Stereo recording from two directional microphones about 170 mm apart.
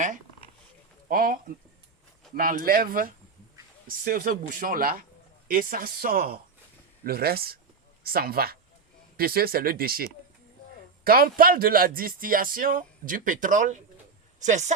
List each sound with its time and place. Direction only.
1.1 s speech: 60° right (ahead or behind)